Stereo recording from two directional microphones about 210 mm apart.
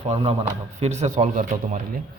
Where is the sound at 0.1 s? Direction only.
25° right (ahead or behind).